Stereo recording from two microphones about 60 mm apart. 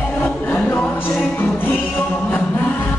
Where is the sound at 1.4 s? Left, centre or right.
Left.